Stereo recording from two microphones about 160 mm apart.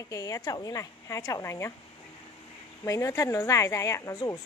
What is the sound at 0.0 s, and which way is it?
Speech, 20° left (ahead or behind).